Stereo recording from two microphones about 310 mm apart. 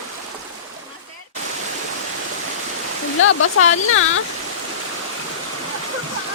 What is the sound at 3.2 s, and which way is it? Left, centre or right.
Speech, left.